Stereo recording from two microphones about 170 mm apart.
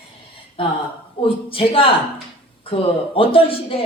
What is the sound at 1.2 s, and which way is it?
Speech, 30° left (ahead or behind).